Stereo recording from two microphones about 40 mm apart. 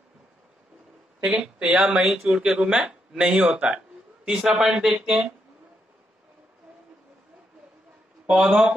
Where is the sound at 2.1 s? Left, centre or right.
Centre.